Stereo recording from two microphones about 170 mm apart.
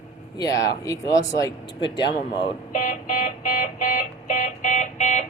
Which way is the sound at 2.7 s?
50° left (ahead or behind).